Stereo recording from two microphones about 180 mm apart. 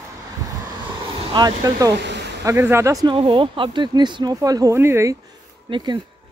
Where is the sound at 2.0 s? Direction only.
75° right (ahead or behind).